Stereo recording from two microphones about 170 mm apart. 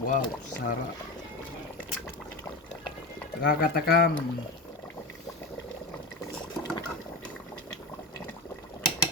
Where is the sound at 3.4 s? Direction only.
60° left (ahead or behind).